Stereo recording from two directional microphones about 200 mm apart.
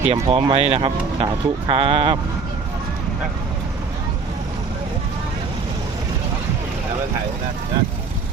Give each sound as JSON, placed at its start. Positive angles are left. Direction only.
{"t": 0.0, "sound": "speech", "side_deg": -30}